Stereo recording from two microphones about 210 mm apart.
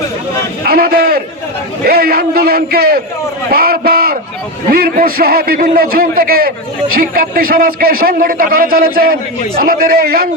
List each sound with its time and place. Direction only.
0.6 s a man's voice: 45° right (ahead or behind)